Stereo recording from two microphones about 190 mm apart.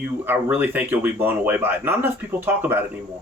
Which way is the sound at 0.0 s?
10° right (ahead or behind).